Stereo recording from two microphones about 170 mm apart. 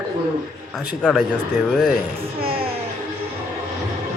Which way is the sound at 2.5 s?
35° right (ahead or behind).